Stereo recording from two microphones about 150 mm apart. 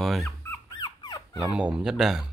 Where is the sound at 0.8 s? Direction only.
25° left (ahead or behind).